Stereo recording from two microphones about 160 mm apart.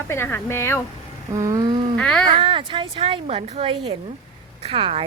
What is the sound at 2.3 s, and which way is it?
Speech, 35° right (ahead or behind).